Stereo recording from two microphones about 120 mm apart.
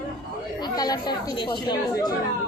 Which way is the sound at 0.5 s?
35° left (ahead or behind).